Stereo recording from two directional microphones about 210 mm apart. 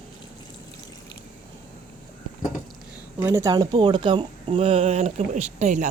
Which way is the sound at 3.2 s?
10° right (ahead or behind).